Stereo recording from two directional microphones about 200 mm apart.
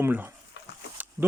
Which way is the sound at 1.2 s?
10° right (ahead or behind).